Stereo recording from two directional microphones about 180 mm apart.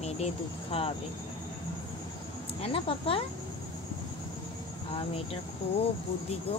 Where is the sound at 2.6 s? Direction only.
30° left (ahead or behind).